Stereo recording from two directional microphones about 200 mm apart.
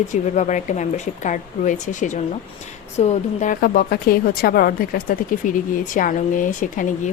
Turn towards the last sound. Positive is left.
turn(degrees=40)  # may be behind; listen again after turning